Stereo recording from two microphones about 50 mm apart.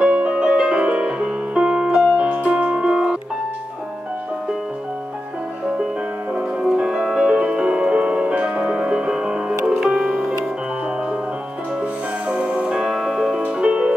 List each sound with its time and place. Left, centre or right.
0.0 s music: right
2.2 s music: right
6.6 s music: centre
11.8 s music: right